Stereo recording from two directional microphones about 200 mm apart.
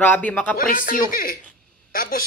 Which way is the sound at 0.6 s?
45° left (ahead or behind).